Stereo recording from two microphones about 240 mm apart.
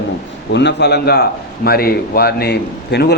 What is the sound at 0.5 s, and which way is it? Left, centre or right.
A man's voice, left.